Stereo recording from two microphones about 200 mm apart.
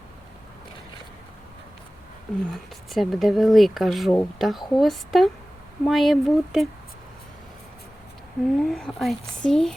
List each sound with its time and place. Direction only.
2.5 s speech: centre (ahead or behind)
8.4 s speech: centre (ahead or behind)